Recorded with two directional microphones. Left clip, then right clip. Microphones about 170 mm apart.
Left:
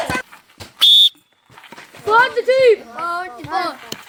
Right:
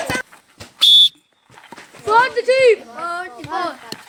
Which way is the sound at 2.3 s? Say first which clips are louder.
Even; 50° left (ahead or behind).